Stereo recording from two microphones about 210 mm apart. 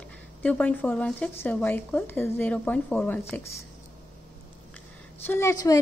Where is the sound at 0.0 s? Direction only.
5° left (ahead or behind).